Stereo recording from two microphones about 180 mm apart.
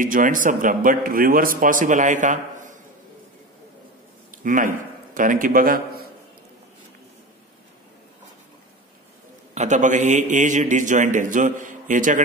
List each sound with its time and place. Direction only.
0.0 s speech: 50° right (ahead or behind)
4.4 s a man's voice: 45° right (ahead or behind)
9.5 s speech: 40° right (ahead or behind)